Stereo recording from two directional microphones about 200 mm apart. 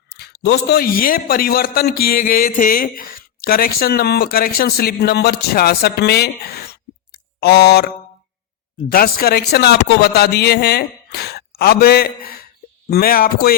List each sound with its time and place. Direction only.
0.2 s a man's voice: 55° left (ahead or behind)
8.9 s a man's voice: 45° left (ahead or behind)